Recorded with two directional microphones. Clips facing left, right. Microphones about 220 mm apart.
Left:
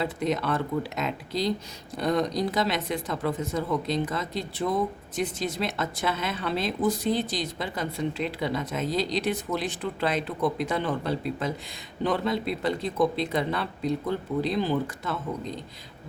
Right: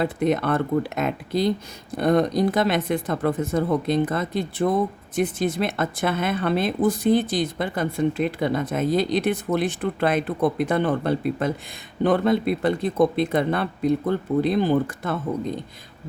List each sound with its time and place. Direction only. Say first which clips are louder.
0.0 s speech: right 5 dB; 55° right (ahead or behind)